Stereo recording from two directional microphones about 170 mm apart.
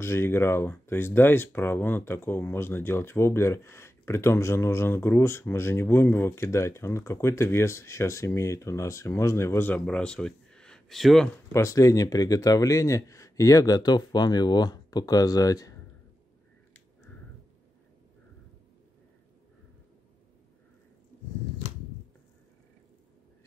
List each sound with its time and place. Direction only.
0.0 s speech: 15° left (ahead or behind)
11.5 s speech: 20° left (ahead or behind)